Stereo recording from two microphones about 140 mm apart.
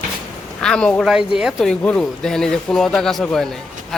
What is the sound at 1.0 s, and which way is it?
Speech, 5° right (ahead or behind).